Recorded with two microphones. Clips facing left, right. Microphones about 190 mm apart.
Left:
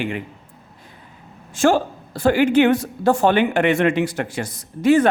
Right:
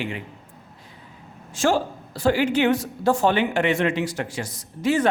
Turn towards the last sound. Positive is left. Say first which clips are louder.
# left 6 dB
turn(degrees=55)  # may be behind; listen again after turning